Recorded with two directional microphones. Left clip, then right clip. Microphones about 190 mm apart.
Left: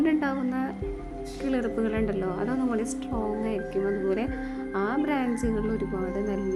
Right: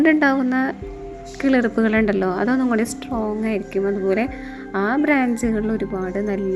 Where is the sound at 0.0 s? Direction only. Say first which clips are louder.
Right 10 dB; 25° right (ahead or behind).